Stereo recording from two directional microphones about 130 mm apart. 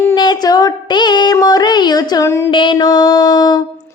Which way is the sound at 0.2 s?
30° left (ahead or behind).